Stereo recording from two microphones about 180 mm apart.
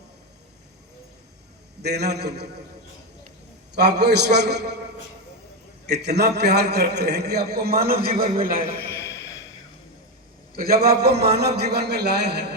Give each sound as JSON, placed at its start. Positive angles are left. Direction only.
{"t": 1.8, "sound": "a man's voice", "side_deg": -65}
{"t": 3.8, "sound": "a man's voice", "side_deg": -65}
{"t": 5.8, "sound": "a man's voice", "side_deg": -65}
{"t": 8.9, "sound": "a sound", "side_deg": 15}
{"t": 10.5, "sound": "a man's voice", "side_deg": -60}